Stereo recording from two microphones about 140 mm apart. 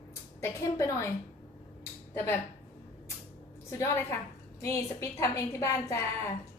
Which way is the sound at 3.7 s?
20° left (ahead or behind).